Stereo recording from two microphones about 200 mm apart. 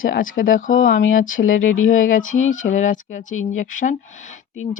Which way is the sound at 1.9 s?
40° left (ahead or behind).